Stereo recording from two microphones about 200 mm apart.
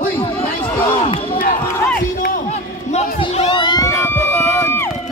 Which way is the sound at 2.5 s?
35° left (ahead or behind).